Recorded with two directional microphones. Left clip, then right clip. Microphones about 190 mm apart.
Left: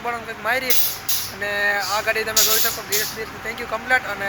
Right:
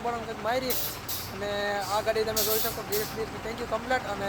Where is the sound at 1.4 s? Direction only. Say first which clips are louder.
Left 9 dB; centre (ahead or behind).